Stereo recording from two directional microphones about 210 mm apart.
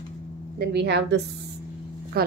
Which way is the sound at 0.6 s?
50° right (ahead or behind).